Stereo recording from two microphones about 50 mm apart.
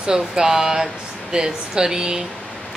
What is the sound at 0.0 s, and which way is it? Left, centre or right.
A woman's voice, centre.